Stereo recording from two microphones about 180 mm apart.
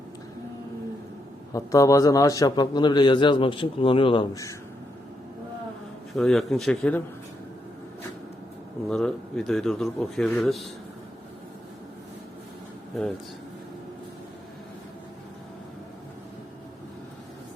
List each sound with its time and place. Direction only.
1.5 s a man's voice: 20° left (ahead or behind)
6.1 s a man's voice: centre (ahead or behind)
8.9 s a man's voice: 5° left (ahead or behind)